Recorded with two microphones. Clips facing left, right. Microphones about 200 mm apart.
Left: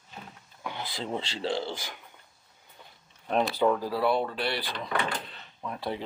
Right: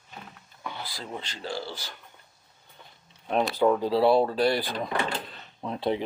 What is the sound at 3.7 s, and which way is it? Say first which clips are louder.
Speech: right 6 dB; 25° right (ahead or behind).